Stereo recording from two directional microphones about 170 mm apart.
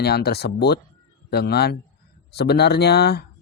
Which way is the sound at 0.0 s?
70° left (ahead or behind).